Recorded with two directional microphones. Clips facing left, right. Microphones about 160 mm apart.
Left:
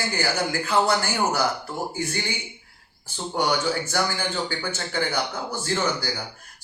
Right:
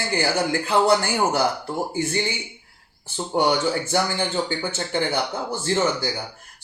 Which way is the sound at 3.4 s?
25° right (ahead or behind).